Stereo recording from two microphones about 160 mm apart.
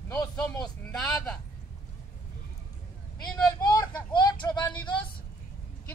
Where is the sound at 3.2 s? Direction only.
25° left (ahead or behind).